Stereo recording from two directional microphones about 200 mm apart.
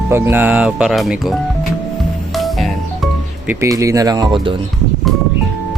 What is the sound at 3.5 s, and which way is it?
Speech, 15° right (ahead or behind).